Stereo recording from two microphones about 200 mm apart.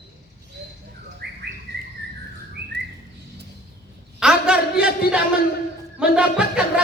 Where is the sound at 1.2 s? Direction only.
55° right (ahead or behind).